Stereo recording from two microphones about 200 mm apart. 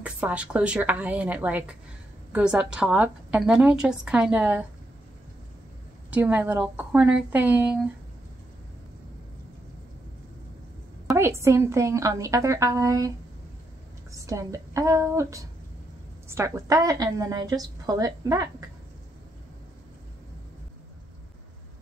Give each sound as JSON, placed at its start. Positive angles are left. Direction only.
{"t": 0.0, "sound": "a woman's voice", "side_deg": -5}
{"t": 6.0, "sound": "a woman's voice", "side_deg": -5}
{"t": 11.1, "sound": "a woman's voice", "side_deg": -15}
{"t": 14.1, "sound": "a woman's voice", "side_deg": -15}